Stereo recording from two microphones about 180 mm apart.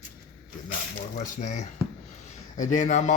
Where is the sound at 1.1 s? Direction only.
45° left (ahead or behind).